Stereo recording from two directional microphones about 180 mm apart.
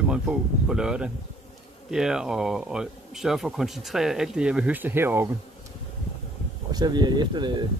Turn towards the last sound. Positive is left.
turn(degrees=-25)  # may be behind; listen again after turning